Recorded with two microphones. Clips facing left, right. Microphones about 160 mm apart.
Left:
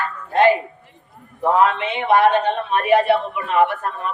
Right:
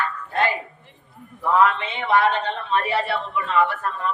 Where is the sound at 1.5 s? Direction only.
20° left (ahead or behind).